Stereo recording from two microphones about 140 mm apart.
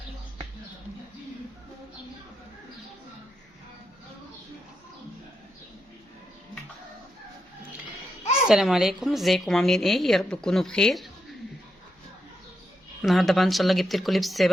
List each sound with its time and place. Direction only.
8.4 s a woman's voice: 5° right (ahead or behind)
13.0 s a woman's voice: centre (ahead or behind)